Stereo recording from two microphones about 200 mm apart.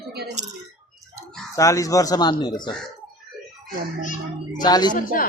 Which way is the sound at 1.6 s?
15° left (ahead or behind).